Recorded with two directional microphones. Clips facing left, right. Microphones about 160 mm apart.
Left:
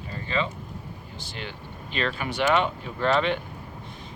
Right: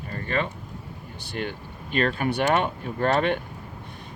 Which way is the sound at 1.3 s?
50° right (ahead or behind).